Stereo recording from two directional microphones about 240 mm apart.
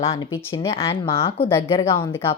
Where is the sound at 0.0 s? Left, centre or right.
Left.